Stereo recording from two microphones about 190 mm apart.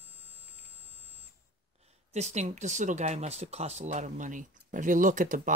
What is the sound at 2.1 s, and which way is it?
Speech, 35° right (ahead or behind).